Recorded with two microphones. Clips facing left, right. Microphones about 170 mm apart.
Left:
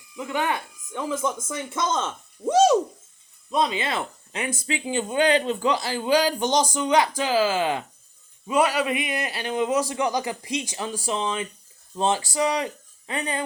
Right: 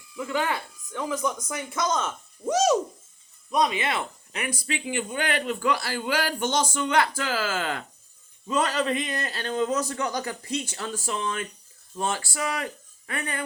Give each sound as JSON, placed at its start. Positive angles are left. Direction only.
{"t": 0.2, "sound": "speech", "side_deg": 20}